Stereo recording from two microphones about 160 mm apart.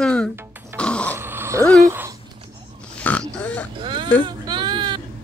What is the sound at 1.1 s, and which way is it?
Dog, 15° right (ahead or behind).